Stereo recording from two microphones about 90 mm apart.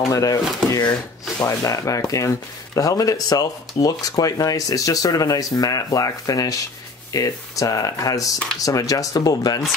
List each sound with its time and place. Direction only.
0.0 s speech: 40° left (ahead or behind)